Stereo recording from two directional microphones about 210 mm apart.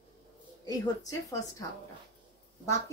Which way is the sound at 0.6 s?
15° left (ahead or behind).